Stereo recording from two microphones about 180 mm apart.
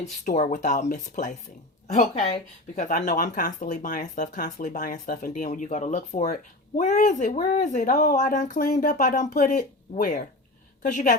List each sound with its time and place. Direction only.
0.3 s a woman's voice: 45° left (ahead or behind)